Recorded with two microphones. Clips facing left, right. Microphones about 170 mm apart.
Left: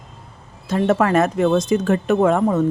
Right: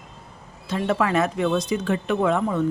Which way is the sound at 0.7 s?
45° left (ahead or behind).